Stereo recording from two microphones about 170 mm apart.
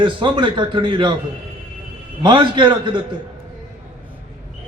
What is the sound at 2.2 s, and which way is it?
Speech, 30° right (ahead or behind).